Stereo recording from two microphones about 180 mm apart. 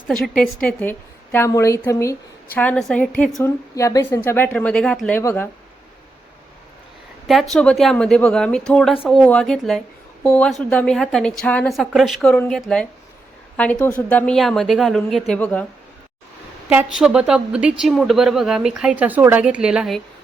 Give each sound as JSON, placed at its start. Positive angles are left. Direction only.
{"t": 0.1, "sound": "a woman's voice", "side_deg": 5}
{"t": 2.6, "sound": "a woman's voice", "side_deg": 5}
{"t": 7.3, "sound": "speech", "side_deg": 0}
{"t": 16.6, "sound": "speech", "side_deg": -5}